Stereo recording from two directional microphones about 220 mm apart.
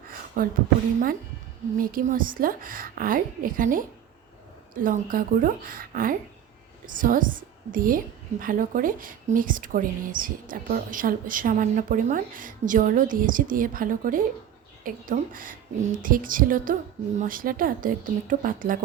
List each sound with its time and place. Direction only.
0.4 s a woman's voice: 40° right (ahead or behind)
1.8 s a woman's voice: 40° right (ahead or behind)